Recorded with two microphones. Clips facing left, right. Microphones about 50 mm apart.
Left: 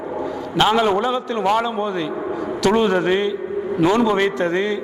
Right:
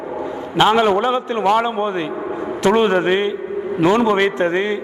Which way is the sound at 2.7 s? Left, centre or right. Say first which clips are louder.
Right 2 dB; right.